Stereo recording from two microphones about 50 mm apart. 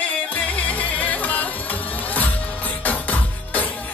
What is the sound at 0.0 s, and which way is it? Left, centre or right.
Music, left.